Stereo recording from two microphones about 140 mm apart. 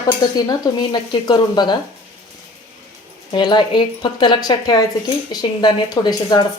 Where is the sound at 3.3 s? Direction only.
35° left (ahead or behind).